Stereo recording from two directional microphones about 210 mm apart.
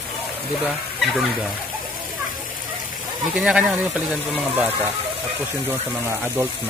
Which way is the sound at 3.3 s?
5° right (ahead or behind).